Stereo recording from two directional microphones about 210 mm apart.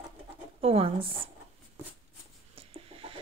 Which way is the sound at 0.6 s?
30° right (ahead or behind).